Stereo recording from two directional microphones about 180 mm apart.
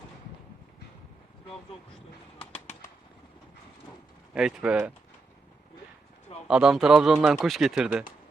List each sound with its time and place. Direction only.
2.4 s bird: 35° left (ahead or behind)
4.4 s speech: 5° right (ahead or behind)
6.5 s speech: 5° right (ahead or behind)